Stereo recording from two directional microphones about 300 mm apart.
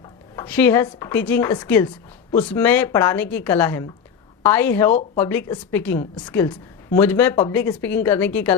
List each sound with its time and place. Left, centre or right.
0.3 s speech: centre
4.9 s speech: left
5.2 s speech: centre